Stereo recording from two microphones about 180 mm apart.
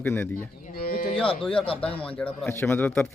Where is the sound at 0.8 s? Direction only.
55° left (ahead or behind).